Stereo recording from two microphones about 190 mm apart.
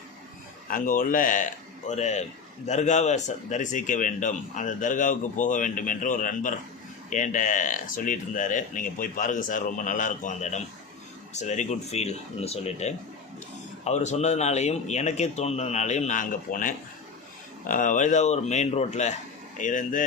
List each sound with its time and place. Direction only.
0.7 s speech: 45° left (ahead or behind)